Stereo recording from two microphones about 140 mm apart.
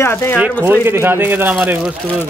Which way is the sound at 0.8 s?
15° right (ahead or behind).